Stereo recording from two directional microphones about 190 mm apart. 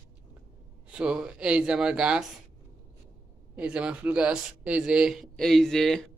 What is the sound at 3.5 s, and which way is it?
A man's voice, 5° right (ahead or behind).